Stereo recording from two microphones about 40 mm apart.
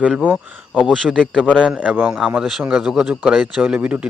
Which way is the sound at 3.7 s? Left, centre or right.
Right.